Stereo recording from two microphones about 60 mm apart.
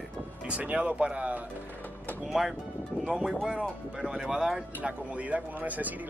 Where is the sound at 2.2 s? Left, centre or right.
Centre.